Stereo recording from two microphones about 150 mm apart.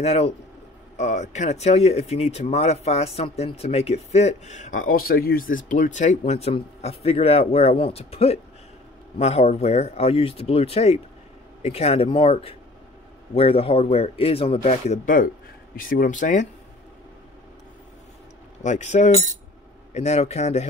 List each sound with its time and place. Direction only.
0.0 s a man's voice: 45° left (ahead or behind)
14.6 s speech: 50° left (ahead or behind)
18.6 s speech: 50° left (ahead or behind)